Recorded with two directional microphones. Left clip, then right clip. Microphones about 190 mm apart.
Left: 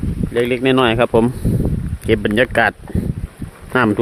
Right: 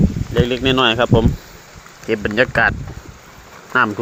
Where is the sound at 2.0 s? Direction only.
50° left (ahead or behind).